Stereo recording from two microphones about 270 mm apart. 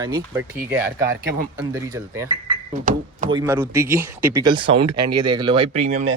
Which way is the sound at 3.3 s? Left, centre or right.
Centre.